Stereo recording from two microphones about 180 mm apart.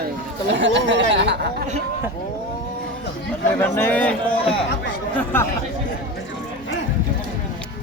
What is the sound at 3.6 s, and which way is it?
Speech, 10° left (ahead or behind).